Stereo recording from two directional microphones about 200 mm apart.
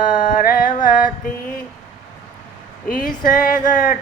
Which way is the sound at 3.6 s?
40° left (ahead or behind).